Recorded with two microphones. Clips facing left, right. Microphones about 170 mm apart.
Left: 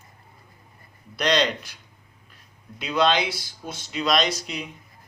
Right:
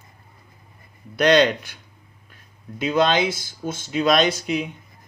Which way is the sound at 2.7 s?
50° right (ahead or behind).